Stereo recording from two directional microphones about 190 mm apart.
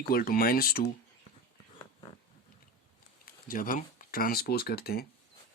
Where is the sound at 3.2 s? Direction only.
45° left (ahead or behind).